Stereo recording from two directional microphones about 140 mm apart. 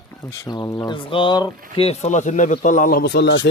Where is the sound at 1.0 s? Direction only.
35° left (ahead or behind).